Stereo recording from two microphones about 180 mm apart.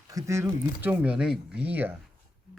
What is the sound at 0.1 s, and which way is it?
A man's voice, 15° right (ahead or behind).